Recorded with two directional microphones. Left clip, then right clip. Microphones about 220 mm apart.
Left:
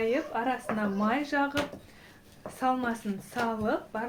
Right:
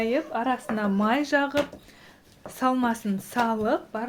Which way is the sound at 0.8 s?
55° right (ahead or behind).